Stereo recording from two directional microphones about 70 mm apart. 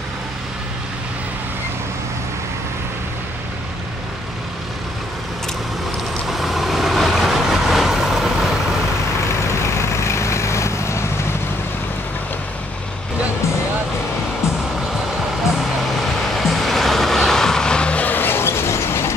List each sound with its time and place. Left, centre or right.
6.2 s vehicle: centre
9.6 s vehicle: left
16.3 s vehicle: centre; by 19.1 s left